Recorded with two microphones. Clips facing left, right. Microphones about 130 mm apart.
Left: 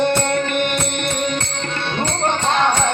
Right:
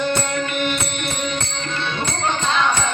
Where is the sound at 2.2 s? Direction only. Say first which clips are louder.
Left 2 dB; 55° left (ahead or behind).